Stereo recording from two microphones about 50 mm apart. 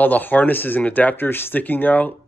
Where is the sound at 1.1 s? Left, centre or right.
Left.